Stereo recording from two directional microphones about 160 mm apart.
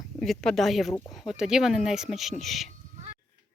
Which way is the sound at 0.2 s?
Centre (ahead or behind).